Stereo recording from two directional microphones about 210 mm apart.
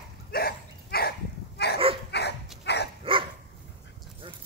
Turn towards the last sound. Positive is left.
turn(degrees=-25)  # may be behind; listen again after turning